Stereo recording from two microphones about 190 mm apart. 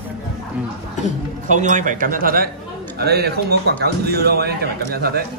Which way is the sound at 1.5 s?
40° right (ahead or behind).